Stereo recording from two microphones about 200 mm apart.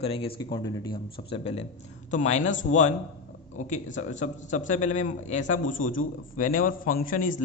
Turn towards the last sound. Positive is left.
turn(degrees=40)  # may be behind; listen again after turning